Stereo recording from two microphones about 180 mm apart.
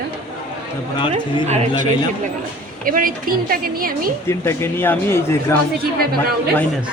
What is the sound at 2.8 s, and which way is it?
A woman's voice, 50° right (ahead or behind).